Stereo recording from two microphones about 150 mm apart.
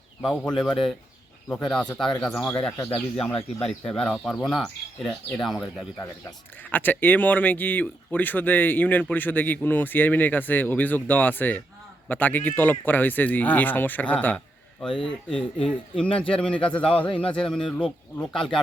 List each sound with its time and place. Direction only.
0.2 s speech: centre (ahead or behind)
2.7 s speech: 25° left (ahead or behind)
3.2 s speech: 10° left (ahead or behind)